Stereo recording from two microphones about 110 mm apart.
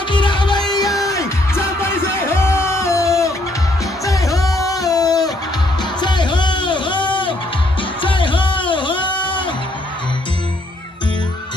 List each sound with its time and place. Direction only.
0.1 s music: 45° left (ahead or behind)
0.8 s music: centre (ahead or behind)
1.1 s music: 25° left (ahead or behind)
5.9 s music: 45° left (ahead or behind)
8.0 s a sound: 50° left (ahead or behind)